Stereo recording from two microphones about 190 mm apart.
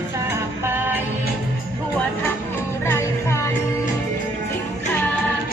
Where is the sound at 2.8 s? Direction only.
15° left (ahead or behind).